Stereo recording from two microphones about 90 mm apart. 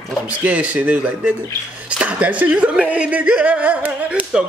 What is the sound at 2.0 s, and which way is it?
Speech, 15° right (ahead or behind).